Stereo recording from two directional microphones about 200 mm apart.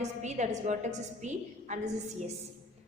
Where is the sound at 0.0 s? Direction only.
35° right (ahead or behind).